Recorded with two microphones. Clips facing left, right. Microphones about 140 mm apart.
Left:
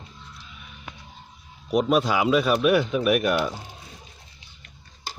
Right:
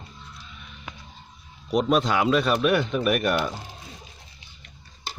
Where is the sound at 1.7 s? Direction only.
5° left (ahead or behind).